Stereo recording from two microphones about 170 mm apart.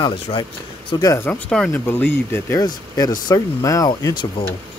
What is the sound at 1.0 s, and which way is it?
Speech, 15° left (ahead or behind).